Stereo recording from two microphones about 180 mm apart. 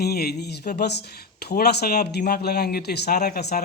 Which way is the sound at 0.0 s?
60° left (ahead or behind).